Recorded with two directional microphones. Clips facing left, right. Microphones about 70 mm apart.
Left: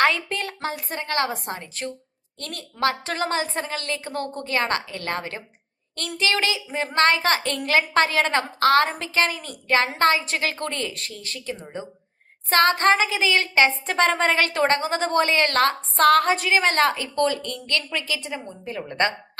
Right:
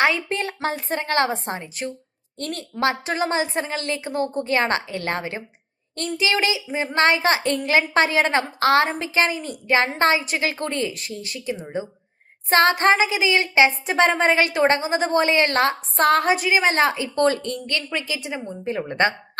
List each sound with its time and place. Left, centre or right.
0.3 s a woman's voice: right
1.6 s a woman's voice: centre
2.4 s a woman's voice: right
2.8 s a woman's voice: centre
6.1 s a woman's voice: centre
17.2 s a woman's voice: right
17.9 s a woman's voice: centre